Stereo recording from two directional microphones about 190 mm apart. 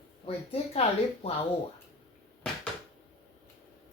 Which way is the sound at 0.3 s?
30° left (ahead or behind).